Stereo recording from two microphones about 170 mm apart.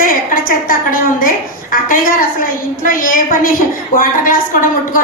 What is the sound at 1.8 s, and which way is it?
A woman's voice, 55° left (ahead or behind).